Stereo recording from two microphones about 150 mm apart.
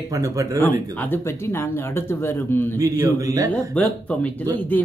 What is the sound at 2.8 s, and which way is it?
Speech, 20° right (ahead or behind).